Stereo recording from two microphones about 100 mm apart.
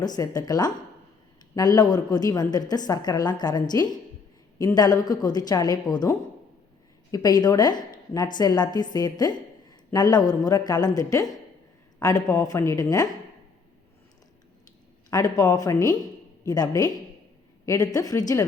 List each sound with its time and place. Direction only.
0.0 s a woman's voice: 40° left (ahead or behind)
15.1 s a woman's voice: 35° left (ahead or behind)